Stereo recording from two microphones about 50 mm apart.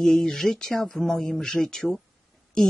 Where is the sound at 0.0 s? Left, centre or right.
Centre.